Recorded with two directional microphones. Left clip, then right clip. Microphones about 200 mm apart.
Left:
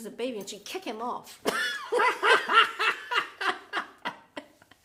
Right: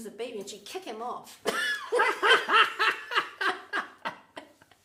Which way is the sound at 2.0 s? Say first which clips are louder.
Even; 20° right (ahead or behind).